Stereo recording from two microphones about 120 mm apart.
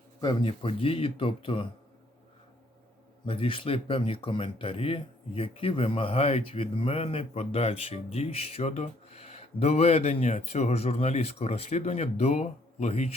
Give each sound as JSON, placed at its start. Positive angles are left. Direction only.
{"t": 0.2, "sound": "speech", "side_deg": 40}
{"t": 3.2, "sound": "speech", "side_deg": 50}